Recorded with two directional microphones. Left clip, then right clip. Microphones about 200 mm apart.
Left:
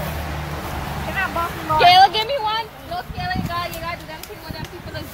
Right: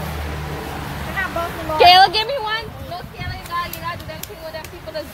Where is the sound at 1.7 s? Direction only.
55° right (ahead or behind); by 2.6 s 40° right (ahead or behind).